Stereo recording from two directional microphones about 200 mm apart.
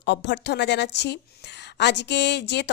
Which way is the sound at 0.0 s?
60° left (ahead or behind).